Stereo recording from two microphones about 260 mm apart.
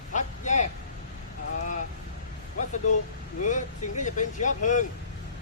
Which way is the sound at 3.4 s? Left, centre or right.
Left.